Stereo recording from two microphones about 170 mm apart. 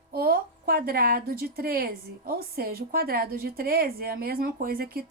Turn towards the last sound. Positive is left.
turn(degrees=-60)  # may be behind; listen again after turning